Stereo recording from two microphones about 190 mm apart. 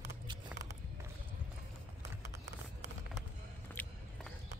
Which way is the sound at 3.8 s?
10° left (ahead or behind).